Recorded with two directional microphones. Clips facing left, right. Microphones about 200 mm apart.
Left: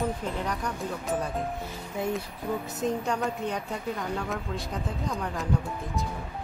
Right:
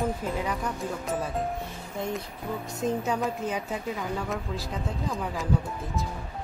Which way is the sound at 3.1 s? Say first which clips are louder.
Right 1 dB; centre (ahead or behind).